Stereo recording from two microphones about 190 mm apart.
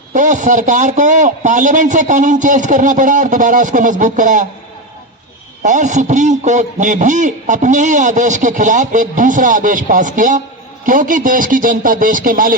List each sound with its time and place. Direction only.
0.1 s a man's voice: 40° right (ahead or behind)
5.6 s a man's voice: 40° right (ahead or behind)